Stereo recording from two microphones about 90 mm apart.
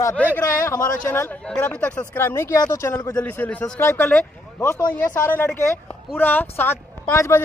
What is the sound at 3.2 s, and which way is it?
Speech, 15° left (ahead or behind).